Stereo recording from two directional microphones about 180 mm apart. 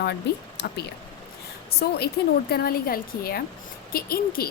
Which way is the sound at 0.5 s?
65° left (ahead or behind).